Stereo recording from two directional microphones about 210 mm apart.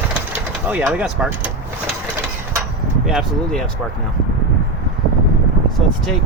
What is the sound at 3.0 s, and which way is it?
Speech, centre (ahead or behind).